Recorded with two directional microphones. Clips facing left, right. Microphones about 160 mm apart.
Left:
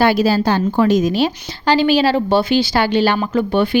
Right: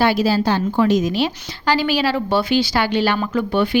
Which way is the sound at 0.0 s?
50° left (ahead or behind).